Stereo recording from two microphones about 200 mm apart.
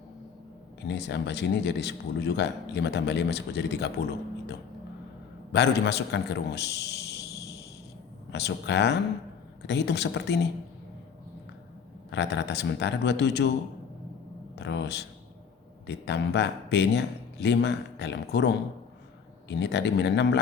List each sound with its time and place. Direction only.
0.9 s a man's voice: 60° left (ahead or behind)
12.1 s speech: 60° left (ahead or behind)
14.5 s speech: 60° left (ahead or behind)